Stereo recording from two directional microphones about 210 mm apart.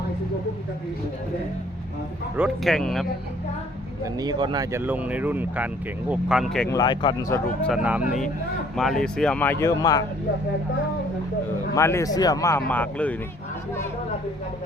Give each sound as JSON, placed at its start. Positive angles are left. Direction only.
{"t": 2.3, "sound": "speech", "side_deg": 0}
{"t": 4.0, "sound": "speech", "side_deg": -20}
{"t": 6.7, "sound": "a man's voice", "side_deg": 20}
{"t": 7.7, "sound": "a man's voice", "side_deg": -5}
{"t": 11.7, "sound": "a man's voice", "side_deg": 15}